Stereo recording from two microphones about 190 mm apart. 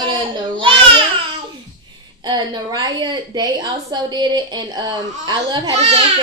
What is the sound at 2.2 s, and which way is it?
A woman's voice, 20° right (ahead or behind).